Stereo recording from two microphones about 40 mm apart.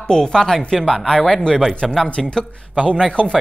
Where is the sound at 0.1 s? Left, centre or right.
Centre.